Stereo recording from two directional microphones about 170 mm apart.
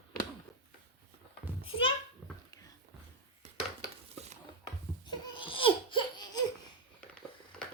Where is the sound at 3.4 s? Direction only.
40° right (ahead or behind).